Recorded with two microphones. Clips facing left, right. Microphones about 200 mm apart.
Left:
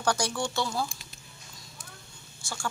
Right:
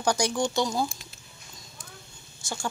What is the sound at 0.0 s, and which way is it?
Speech, 15° right (ahead or behind).